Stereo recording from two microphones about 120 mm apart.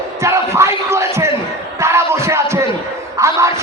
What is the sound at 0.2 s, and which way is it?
Speech, 25° right (ahead or behind).